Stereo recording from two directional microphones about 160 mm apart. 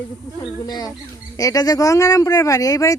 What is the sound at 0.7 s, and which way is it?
Speech, 25° left (ahead or behind).